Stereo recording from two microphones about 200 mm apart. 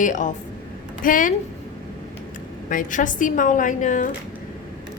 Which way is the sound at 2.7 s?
40° left (ahead or behind).